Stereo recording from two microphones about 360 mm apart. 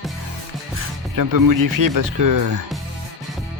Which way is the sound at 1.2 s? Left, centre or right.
Right.